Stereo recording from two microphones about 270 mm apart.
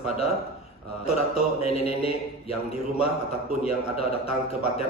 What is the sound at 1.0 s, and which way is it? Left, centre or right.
Mantra, left.